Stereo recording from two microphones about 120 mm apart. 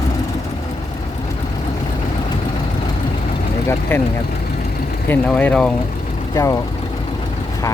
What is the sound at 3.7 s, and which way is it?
Speech, 15° left (ahead or behind).